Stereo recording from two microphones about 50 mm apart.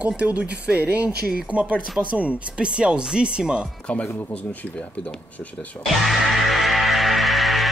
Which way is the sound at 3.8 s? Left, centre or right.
Left.